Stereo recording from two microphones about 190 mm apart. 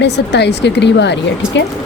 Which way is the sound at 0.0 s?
65° left (ahead or behind).